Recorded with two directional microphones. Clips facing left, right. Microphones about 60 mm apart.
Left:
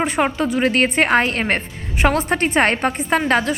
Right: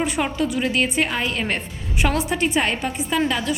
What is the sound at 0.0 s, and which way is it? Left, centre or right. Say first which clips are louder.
A woman's voice: left 3 dB; left.